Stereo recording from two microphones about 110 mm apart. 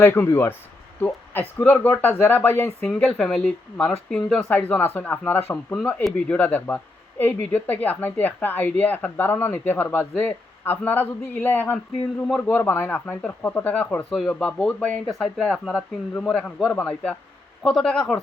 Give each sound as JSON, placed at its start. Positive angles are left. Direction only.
{"t": 0.0, "sound": "speech", "side_deg": 20}
{"t": 2.8, "sound": "speech", "side_deg": 5}